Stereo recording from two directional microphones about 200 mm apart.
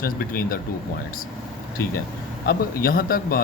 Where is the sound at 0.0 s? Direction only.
45° left (ahead or behind).